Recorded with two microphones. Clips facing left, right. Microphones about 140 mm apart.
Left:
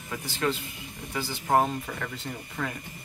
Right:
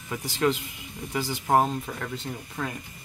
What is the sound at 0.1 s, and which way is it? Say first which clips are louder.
Speech: right 4 dB; 15° right (ahead or behind).